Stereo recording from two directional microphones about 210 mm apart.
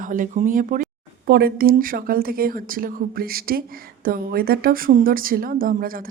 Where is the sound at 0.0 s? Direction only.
40° right (ahead or behind).